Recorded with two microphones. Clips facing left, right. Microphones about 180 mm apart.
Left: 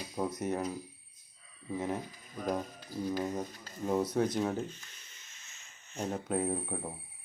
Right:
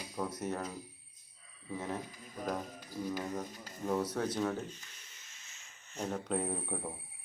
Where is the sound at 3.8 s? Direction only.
15° left (ahead or behind).